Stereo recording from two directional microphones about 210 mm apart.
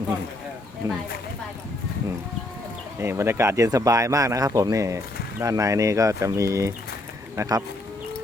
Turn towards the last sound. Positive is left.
turn(degrees=-15)  # may be behind; listen again after turning